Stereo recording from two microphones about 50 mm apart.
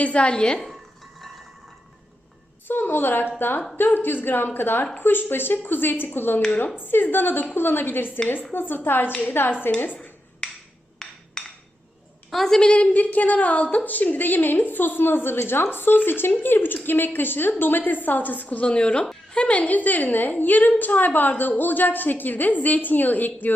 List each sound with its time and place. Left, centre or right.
0.0 s a woman's voice: left
2.6 s a woman's voice: left
9.7 s a woman's voice: left
11.0 s a sound: centre
12.3 s a woman's voice: centre
12.5 s a woman's voice: left